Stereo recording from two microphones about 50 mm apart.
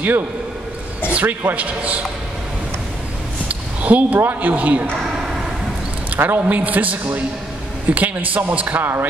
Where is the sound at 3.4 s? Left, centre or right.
Right.